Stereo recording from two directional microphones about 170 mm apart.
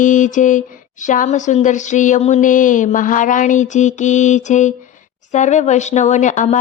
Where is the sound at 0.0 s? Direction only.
50° left (ahead or behind).